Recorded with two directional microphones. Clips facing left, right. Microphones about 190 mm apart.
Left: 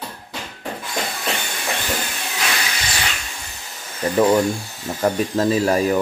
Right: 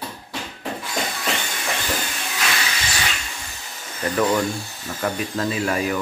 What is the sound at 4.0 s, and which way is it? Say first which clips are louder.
Speech: left 4 dB; 25° left (ahead or behind).